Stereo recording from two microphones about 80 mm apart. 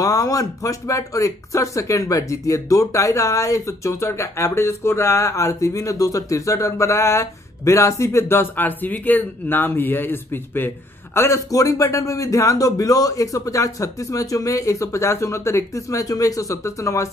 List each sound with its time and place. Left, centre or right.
0.0 s speech: left